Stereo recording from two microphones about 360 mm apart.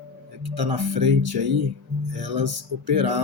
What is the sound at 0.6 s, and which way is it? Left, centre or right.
Speech, right.